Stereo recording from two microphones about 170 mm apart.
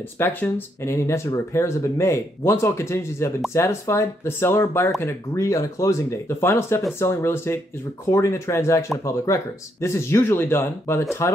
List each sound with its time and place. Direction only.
0.2 s speech: 15° left (ahead or behind)